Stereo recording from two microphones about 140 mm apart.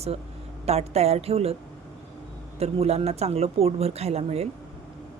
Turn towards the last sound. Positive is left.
turn(degrees=-50)  # may be behind; listen again after turning